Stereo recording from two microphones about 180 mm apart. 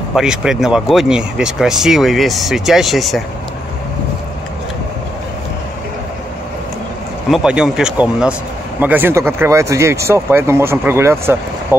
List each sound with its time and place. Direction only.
0.1 s speech: 5° right (ahead or behind)
7.2 s a man's voice: 5° right (ahead or behind)